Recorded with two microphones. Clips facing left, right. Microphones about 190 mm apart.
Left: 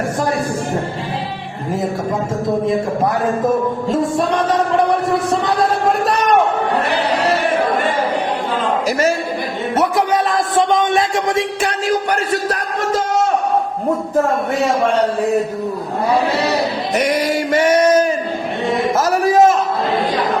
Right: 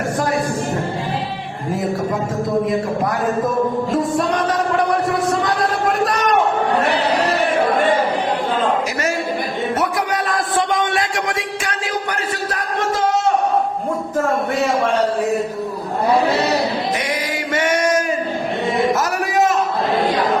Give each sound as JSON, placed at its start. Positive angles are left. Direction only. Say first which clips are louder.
{"t": 2.6, "sound": "speech", "louder": "left 2 dB", "side_deg": 25}
{"t": 10.3, "sound": "music", "louder": "left 2 dB", "side_deg": 20}
{"t": 17.1, "sound": "music", "louder": "left 6 dB", "side_deg": 30}
{"t": 18.9, "sound": "a sound", "louder": "left 5 dB", "side_deg": 30}